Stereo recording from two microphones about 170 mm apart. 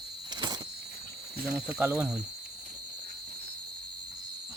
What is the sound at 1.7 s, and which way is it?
Speech, 5° right (ahead or behind).